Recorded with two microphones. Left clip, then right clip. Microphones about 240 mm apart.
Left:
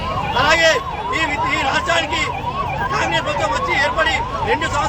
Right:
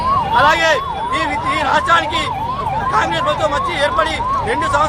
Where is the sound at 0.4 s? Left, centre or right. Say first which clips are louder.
Right 1 dB; centre.